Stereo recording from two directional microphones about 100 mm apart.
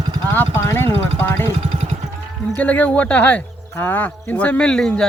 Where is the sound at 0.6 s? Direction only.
25° left (ahead or behind).